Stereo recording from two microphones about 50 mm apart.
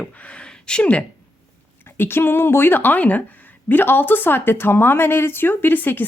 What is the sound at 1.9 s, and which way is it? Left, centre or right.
Speech, left.